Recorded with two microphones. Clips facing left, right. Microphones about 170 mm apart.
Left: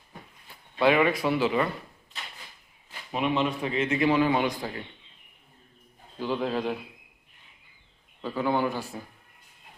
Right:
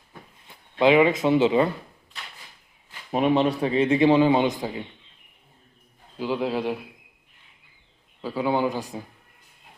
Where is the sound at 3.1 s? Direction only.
35° right (ahead or behind); by 4.8 s 20° right (ahead or behind).